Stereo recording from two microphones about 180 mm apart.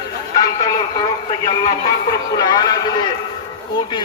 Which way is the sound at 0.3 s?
20° left (ahead or behind).